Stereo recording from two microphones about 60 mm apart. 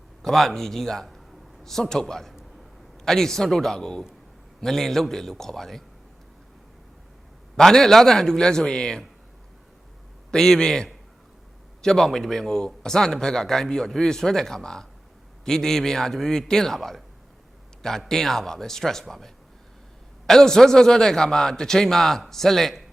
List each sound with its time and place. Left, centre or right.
0.2 s a man's voice: centre
7.5 s a man's voice: centre
10.3 s a man's voice: centre